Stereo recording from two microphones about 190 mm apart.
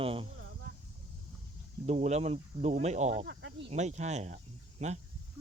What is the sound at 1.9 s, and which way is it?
Speech, 35° right (ahead or behind).